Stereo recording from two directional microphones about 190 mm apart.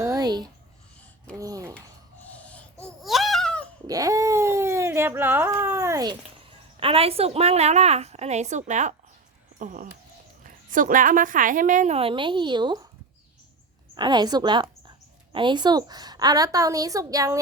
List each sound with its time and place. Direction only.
0.0 s writing: 20° right (ahead or behind)
1.4 s a sound: 20° right (ahead or behind)
2.3 s babbling: 5° left (ahead or behind)
3.8 s cat: 20° right (ahead or behind)
6.7 s a woman's voice: 30° right (ahead or behind)
13.9 s speech: 25° right (ahead or behind)